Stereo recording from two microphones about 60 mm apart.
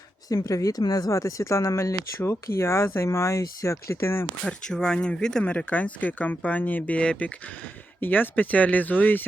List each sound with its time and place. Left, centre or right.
0.3 s speech: left
4.4 s speech: centre; by 9.2 s left